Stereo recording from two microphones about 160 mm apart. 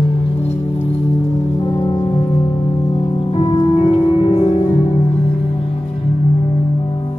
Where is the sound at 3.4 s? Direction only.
35° left (ahead or behind).